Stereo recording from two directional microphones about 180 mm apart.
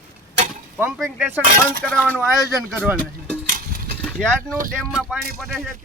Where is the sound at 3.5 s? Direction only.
50° right (ahead or behind).